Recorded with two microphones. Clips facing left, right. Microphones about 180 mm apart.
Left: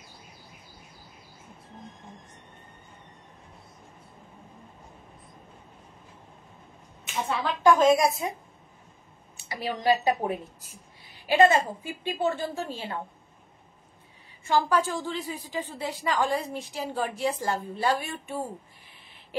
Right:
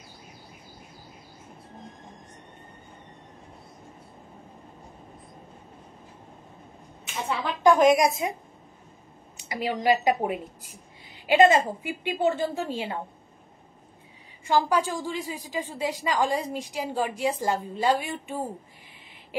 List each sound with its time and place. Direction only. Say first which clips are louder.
7.6 s a woman's voice: right 1 dB; 15° right (ahead or behind)
9.4 s a sound: right 3 dB; 15° right (ahead or behind)
9.8 s a woman's voice: right 1 dB; 15° right (ahead or behind)
14.4 s a woman's voice: right 1 dB; 15° right (ahead or behind)